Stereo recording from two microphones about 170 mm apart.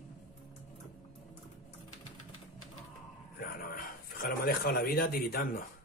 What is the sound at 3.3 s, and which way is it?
Speech, 60° left (ahead or behind).